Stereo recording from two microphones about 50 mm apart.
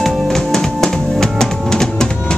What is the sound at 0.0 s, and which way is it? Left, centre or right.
Music, centre.